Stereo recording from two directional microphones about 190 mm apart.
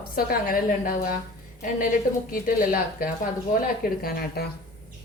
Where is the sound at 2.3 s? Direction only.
50° left (ahead or behind).